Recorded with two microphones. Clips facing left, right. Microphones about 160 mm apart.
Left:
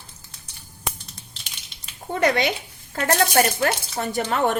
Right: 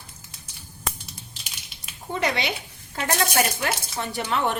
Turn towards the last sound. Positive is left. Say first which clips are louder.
# left 3 dB
turn(degrees=45)  # may be behind; listen again after turning